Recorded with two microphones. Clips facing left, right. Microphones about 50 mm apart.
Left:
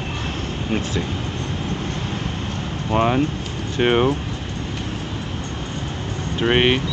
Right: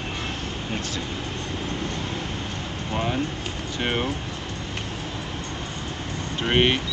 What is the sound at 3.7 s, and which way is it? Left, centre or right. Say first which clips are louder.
Speech: left 9 dB; left.